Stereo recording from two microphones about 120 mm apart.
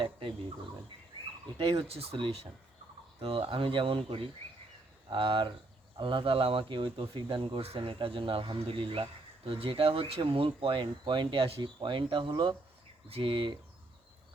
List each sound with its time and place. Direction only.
0.0 s bird: 50° right (ahead or behind)
1.5 s speech: 45° right (ahead or behind)